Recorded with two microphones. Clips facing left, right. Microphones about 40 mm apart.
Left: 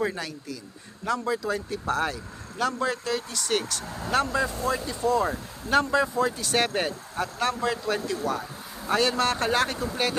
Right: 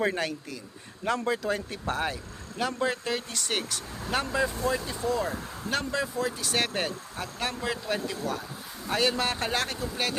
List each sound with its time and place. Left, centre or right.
0.0 s speech: right
1.9 s speech: centre
3.5 s speech: centre
5.7 s speech: centre